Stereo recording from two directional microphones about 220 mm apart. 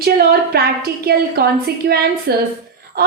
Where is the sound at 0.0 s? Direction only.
45° right (ahead or behind).